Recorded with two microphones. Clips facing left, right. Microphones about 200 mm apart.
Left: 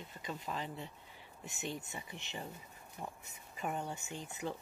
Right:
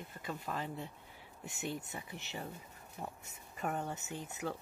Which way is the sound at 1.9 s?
5° right (ahead or behind).